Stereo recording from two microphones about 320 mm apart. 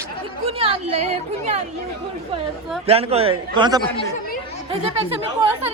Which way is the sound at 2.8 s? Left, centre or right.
Centre.